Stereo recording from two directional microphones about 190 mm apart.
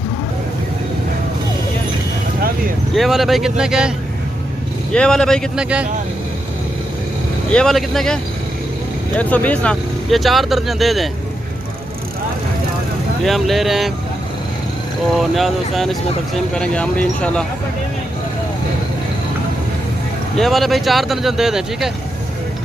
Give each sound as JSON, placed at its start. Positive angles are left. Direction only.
{"t": 2.9, "sound": "speech", "side_deg": 0}
{"t": 7.5, "sound": "speech", "side_deg": 0}
{"t": 13.2, "sound": "speech", "side_deg": 0}
{"t": 15.1, "sound": "speech", "side_deg": 0}
{"t": 20.4, "sound": "speech", "side_deg": 0}